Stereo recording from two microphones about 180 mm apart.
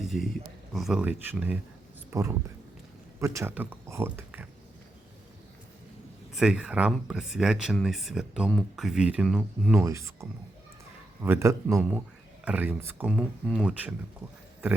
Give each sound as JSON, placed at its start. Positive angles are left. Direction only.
{"t": 0.0, "sound": "a sound", "side_deg": 0}
{"t": 0.7, "sound": "speech", "side_deg": 0}
{"t": 6.3, "sound": "speech", "side_deg": -5}
{"t": 9.7, "sound": "speech", "side_deg": -15}